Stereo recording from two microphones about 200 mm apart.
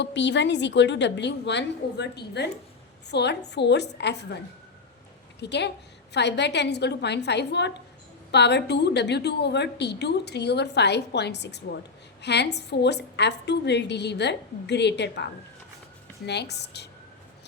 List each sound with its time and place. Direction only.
0.0 s a woman's voice: 60° left (ahead or behind)
5.4 s a woman's voice: 60° left (ahead or behind)